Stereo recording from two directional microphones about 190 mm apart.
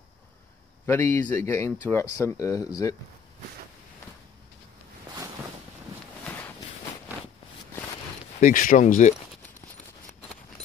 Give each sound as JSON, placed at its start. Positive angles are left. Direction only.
{"t": 0.8, "sound": "speech", "side_deg": 10}
{"t": 6.2, "sound": "walk", "side_deg": 10}
{"t": 8.4, "sound": "speech", "side_deg": 45}